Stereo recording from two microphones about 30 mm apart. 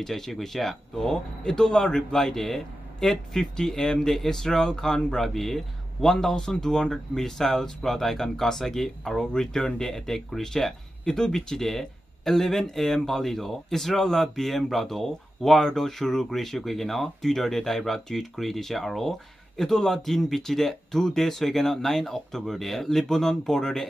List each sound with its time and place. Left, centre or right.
0.0 s speech: centre
0.9 s speech: left
2.3 s speech: centre
5.2 s speech: centre